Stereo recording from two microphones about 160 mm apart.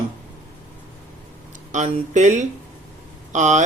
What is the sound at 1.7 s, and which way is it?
Speech, 50° right (ahead or behind).